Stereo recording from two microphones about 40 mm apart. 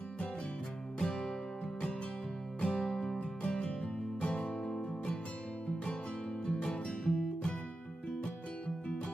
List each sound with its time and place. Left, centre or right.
0.9 s music: centre
2.6 s music: left
6.4 s music: centre